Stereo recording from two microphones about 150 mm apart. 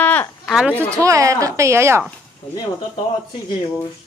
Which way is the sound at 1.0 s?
20° right (ahead or behind).